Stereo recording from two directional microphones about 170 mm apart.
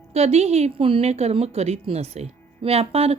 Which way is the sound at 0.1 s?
35° right (ahead or behind).